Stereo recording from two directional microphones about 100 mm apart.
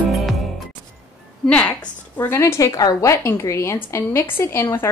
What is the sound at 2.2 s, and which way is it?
A woman's voice, 25° left (ahead or behind).